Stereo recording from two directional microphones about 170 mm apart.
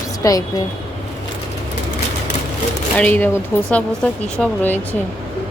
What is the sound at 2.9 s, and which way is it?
Speech, 10° left (ahead or behind).